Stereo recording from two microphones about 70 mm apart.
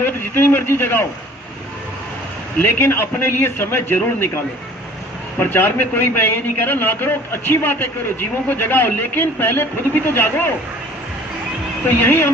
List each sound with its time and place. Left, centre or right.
0.0 s a man's voice: left
2.6 s a man's voice: left
5.4 s a man's voice: left
11.9 s a man's voice: left